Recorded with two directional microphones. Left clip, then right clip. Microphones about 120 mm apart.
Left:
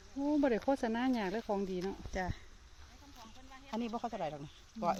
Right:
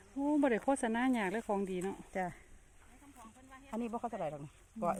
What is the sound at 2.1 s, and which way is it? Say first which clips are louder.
Speech: right 2 dB; 35° right (ahead or behind).